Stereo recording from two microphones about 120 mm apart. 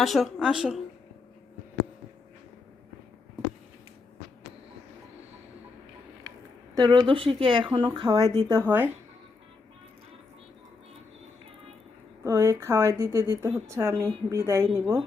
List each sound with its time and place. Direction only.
0.0 s a woman's voice: centre (ahead or behind)
6.7 s speech: 35° right (ahead or behind)
8.4 s speech: 20° right (ahead or behind)
12.2 s speech: 25° right (ahead or behind)